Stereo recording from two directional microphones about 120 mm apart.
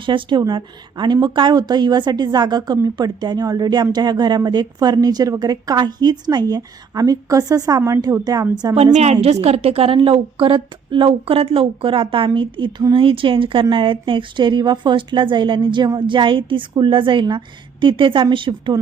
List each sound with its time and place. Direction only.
0.0 s a woman's voice: 40° right (ahead or behind)
8.7 s a woman's voice: 65° right (ahead or behind); by 18.8 s 45° right (ahead or behind)